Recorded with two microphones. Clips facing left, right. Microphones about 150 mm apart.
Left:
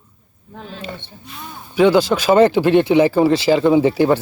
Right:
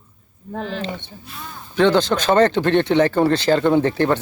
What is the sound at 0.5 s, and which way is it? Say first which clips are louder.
Speech: right 8 dB; 90° right.